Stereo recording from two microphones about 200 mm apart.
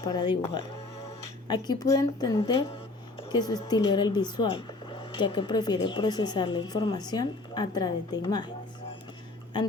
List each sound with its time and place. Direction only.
0.0 s speech: 20° left (ahead or behind)